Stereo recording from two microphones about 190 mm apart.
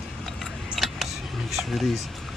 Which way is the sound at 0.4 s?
Centre (ahead or behind).